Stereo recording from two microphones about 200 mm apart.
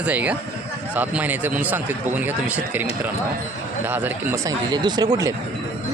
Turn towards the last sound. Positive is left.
turn(degrees=-20)  # may be behind; listen again after turning